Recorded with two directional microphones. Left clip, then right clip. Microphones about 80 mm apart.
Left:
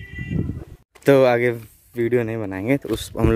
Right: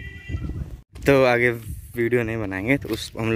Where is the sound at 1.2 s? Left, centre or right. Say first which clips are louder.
Left 1 dB; centre.